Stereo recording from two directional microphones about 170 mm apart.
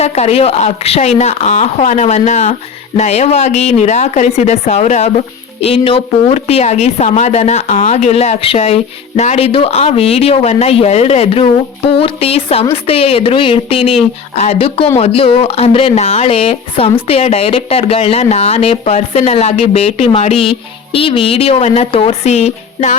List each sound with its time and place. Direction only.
0.0 s speech: 40° left (ahead or behind)